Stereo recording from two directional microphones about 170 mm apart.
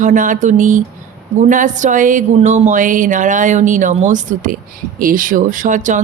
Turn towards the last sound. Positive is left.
turn(degrees=-50)  # may be behind; listen again after turning